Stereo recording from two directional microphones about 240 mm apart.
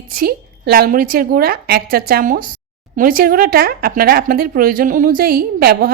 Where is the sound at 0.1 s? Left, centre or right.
Right.